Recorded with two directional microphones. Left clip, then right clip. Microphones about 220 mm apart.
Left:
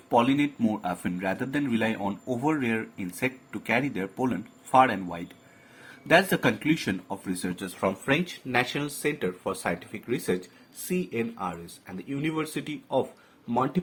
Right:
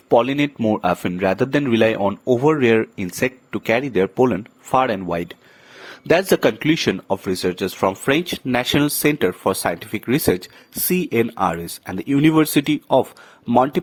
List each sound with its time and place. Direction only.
0.1 s a man's voice: 45° right (ahead or behind)